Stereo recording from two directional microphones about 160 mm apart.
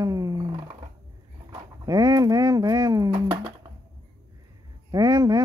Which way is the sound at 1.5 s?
25° right (ahead or behind).